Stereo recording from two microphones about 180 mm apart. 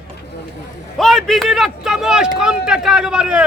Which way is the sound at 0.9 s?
Centre (ahead or behind).